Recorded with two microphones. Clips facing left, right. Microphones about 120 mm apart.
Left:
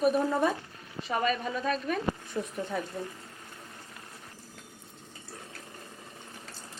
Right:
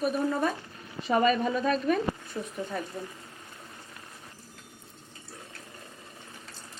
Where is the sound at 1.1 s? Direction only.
5° right (ahead or behind).